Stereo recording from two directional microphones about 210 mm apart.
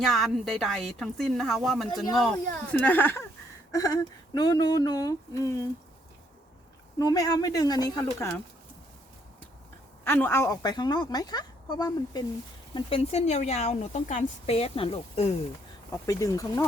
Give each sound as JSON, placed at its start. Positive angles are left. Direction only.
{"t": 0.0, "sound": "a woman's voice", "side_deg": 0}
{"t": 7.0, "sound": "speech", "side_deg": 15}
{"t": 10.0, "sound": "speech", "side_deg": 10}
{"t": 15.9, "sound": "speech", "side_deg": 15}